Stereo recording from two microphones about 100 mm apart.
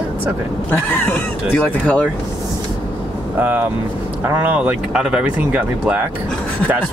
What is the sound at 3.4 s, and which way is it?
Speech, 15° right (ahead or behind).